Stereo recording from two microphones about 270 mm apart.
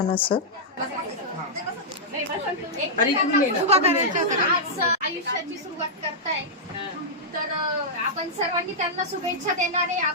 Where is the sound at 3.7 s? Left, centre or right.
Right.